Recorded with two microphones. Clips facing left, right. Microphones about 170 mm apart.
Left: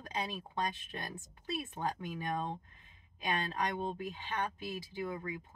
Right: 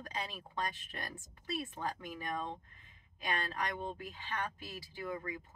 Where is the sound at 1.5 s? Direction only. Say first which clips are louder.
Left 2 dB; 20° left (ahead or behind).